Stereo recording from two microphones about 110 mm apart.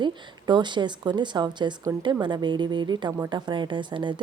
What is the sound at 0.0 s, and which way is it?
A woman's voice, 45° right (ahead or behind).